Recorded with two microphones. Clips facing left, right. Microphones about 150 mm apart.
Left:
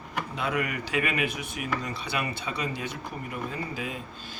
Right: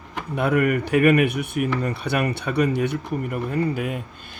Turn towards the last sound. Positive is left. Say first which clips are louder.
# right 10 dB
turn(degrees=-60)  # may be behind; listen again after turning